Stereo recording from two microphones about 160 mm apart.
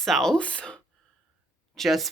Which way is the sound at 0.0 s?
Centre (ahead or behind).